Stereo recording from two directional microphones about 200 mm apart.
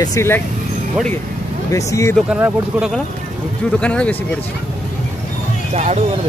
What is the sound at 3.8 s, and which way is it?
Speech, 5° left (ahead or behind).